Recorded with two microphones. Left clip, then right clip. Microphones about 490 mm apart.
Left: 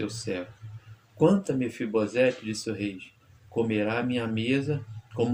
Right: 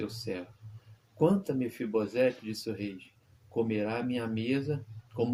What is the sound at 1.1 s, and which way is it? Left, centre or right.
Speech, right.